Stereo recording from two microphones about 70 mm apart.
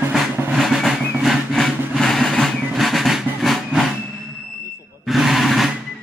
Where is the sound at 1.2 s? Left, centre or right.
Centre.